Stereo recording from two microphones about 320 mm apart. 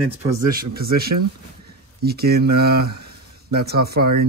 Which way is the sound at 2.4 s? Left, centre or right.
Right.